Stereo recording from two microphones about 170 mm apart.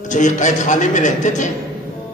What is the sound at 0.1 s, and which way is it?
A man's voice, 45° left (ahead or behind).